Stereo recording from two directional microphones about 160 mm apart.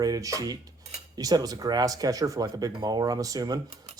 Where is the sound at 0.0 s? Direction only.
20° right (ahead or behind).